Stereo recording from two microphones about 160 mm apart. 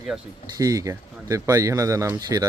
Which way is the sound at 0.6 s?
20° right (ahead or behind).